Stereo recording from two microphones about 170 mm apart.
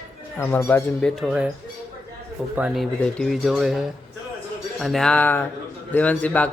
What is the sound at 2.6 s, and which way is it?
A man's voice, 5° right (ahead or behind).